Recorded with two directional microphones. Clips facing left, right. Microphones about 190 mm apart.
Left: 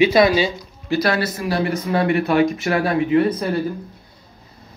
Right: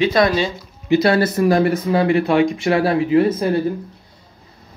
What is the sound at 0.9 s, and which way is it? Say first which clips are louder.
Speech: right 5 dB; 25° right (ahead or behind).